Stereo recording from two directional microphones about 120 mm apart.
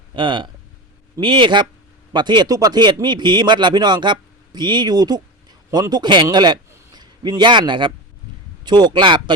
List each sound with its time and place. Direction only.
0.2 s a man's voice: 40° right (ahead or behind)